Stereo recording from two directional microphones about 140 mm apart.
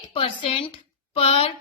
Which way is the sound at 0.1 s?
40° left (ahead or behind).